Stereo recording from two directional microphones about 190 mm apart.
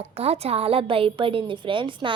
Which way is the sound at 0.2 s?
30° right (ahead or behind).